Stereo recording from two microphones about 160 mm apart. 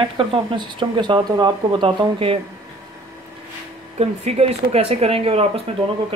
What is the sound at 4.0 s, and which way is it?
Speech, 40° right (ahead or behind).